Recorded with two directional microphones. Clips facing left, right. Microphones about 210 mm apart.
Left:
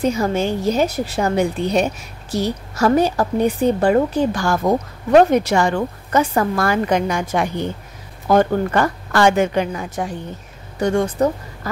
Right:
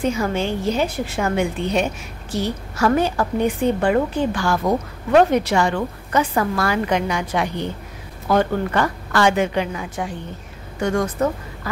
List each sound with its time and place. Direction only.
0.0 s a woman's voice: 40° left (ahead or behind)
10.8 s a woman's voice: 30° left (ahead or behind)